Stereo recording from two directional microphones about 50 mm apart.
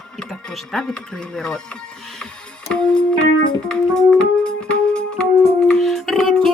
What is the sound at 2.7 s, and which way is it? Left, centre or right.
Music, centre.